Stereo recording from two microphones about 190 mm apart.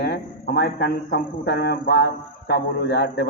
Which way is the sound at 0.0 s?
60° left (ahead or behind).